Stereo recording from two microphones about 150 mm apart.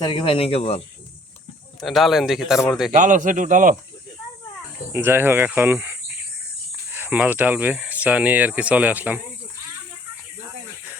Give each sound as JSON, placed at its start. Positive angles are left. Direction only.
{"t": 0.0, "sound": "speech", "side_deg": 35}
{"t": 1.8, "sound": "speech", "side_deg": 0}
{"t": 2.9, "sound": "speech", "side_deg": -60}
{"t": 4.9, "sound": "speech", "side_deg": -15}